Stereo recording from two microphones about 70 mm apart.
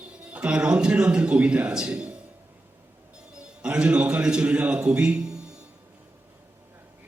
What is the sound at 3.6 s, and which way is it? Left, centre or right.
A man's voice, centre.